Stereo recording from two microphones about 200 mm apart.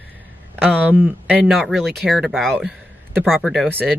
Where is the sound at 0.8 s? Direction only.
10° right (ahead or behind).